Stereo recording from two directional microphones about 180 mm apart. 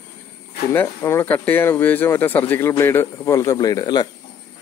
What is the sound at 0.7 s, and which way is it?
Speech, 15° left (ahead or behind).